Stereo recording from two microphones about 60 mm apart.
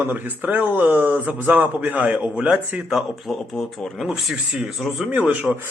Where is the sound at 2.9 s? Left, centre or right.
Centre.